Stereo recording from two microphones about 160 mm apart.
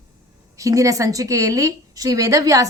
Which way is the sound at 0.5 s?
20° right (ahead or behind).